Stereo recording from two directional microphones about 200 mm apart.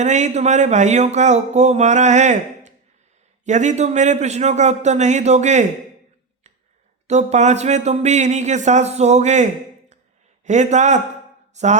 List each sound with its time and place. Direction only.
0.0 s speech: 35° right (ahead or behind)
7.1 s speech: 35° right (ahead or behind)